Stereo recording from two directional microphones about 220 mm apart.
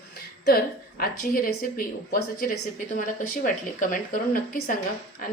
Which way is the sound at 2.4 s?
40° left (ahead or behind).